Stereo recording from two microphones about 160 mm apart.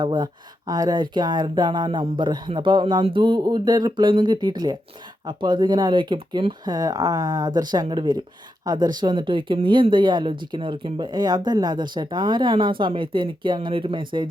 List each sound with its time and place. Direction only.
0.0 s speech: 25° right (ahead or behind)